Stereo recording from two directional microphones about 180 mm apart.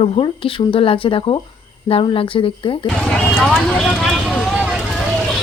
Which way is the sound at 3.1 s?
Centre (ahead or behind).